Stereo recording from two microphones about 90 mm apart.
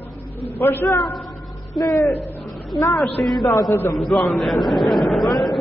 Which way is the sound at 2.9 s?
Centre (ahead or behind).